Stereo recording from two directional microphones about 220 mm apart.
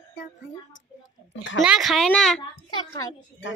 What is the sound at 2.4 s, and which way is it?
Speech, 20° left (ahead or behind).